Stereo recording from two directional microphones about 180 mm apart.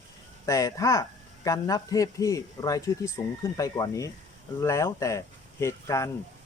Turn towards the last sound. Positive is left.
turn(degrees=15)  # may be behind; listen again after turning